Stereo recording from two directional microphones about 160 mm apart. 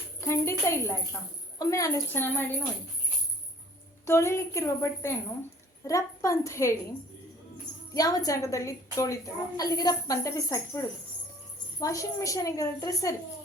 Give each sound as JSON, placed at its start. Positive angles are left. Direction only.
{"t": 0.2, "sound": "a sound", "side_deg": 15}
{"t": 1.5, "sound": "a woman's voice", "side_deg": 20}
{"t": 4.0, "sound": "a woman's voice", "side_deg": 15}
{"t": 7.9, "sound": "a woman's voice", "side_deg": 20}